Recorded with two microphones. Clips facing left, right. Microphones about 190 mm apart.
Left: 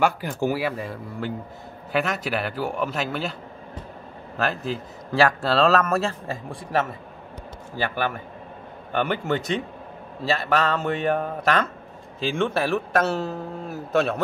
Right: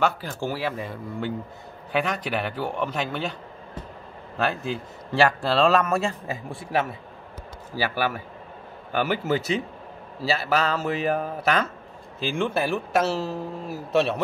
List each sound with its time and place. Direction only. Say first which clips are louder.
0.0 s speech: left 3 dB; 15° left (ahead or behind)
4.4 s a man's voice: even; centre (ahead or behind)